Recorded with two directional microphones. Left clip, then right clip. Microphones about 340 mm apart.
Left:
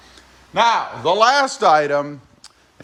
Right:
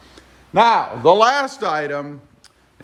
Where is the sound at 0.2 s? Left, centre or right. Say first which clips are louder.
Right 2 dB; centre.